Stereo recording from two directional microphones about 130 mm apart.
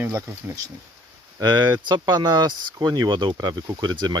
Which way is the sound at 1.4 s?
35° right (ahead or behind).